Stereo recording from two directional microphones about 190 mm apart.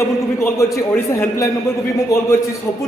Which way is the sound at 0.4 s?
15° left (ahead or behind).